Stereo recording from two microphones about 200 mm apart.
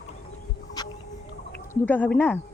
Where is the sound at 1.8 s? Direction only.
10° left (ahead or behind).